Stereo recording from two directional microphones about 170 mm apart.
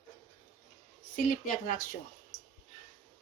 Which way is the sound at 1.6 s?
55° left (ahead or behind).